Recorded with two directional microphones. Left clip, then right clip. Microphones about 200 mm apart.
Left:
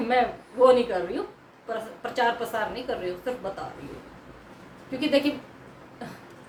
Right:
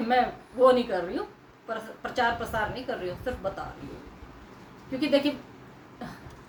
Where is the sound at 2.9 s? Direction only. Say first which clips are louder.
Left 2 dB; 15° left (ahead or behind).